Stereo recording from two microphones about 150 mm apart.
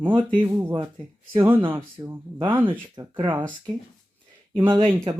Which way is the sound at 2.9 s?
30° right (ahead or behind).